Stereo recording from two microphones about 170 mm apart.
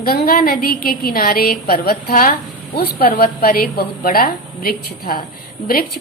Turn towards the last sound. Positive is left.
turn(degrees=60)  # may be behind; listen again after turning